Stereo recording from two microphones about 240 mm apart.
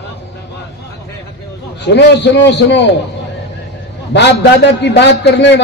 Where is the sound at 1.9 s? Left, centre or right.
Left.